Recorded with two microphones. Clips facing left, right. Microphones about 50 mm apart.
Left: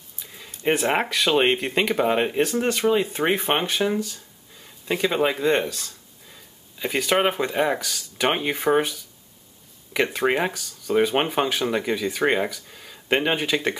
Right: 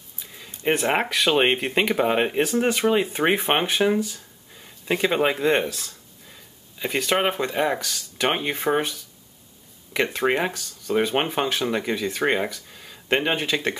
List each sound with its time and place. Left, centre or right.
0.2 s a sound: centre
0.7 s speech: centre
10.1 s speech: centre